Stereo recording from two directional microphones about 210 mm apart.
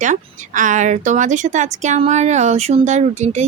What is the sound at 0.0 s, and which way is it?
Speech, 35° right (ahead or behind).